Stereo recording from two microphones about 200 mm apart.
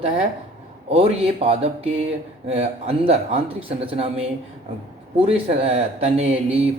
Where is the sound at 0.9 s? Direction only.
30° right (ahead or behind).